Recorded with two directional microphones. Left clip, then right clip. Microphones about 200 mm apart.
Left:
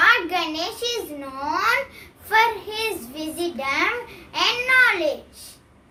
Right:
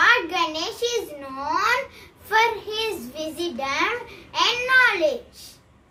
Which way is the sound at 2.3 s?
15° left (ahead or behind).